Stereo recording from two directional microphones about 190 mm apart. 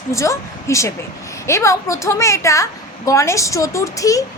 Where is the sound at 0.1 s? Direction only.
15° left (ahead or behind).